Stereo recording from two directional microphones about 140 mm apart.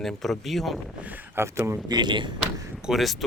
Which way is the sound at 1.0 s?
15° right (ahead or behind).